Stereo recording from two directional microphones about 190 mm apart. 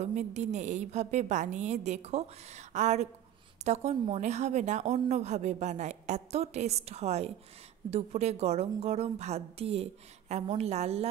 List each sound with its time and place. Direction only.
0.0 s speech: 35° right (ahead or behind)